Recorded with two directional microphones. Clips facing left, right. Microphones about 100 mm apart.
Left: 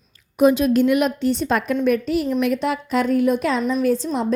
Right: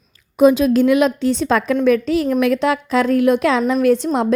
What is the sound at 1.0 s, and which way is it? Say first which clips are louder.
A woman's voice: right 4 dB; 90° right.